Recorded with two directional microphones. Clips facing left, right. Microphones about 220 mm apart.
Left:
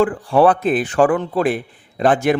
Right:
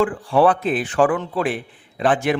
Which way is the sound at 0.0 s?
40° left (ahead or behind).